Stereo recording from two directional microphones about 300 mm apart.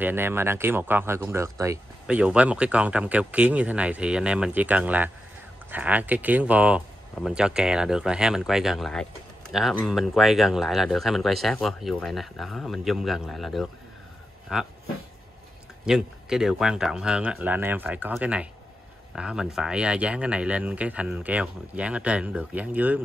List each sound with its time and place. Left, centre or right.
0.0 s speech: centre
15.8 s speech: centre